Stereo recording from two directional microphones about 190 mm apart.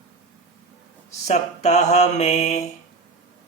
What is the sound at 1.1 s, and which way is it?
Mantra, 35° left (ahead or behind).